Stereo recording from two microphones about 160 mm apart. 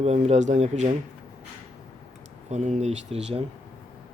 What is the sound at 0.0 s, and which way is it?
Speech, 40° right (ahead or behind).